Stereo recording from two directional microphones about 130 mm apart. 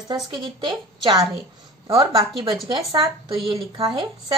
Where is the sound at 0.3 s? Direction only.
35° right (ahead or behind).